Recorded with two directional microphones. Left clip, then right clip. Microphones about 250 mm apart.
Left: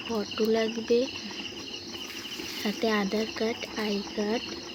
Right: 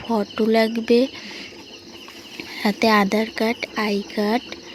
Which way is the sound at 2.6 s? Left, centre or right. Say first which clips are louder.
Right 11 dB; right.